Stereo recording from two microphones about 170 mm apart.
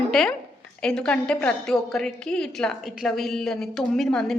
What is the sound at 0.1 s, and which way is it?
A woman's voice, centre (ahead or behind).